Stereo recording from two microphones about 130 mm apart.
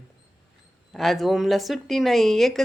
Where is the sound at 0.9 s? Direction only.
Centre (ahead or behind).